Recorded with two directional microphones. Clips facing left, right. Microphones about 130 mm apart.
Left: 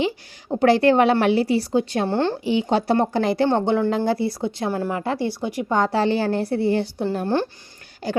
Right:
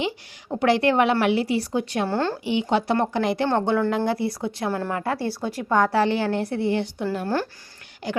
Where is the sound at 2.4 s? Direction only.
35° left (ahead or behind).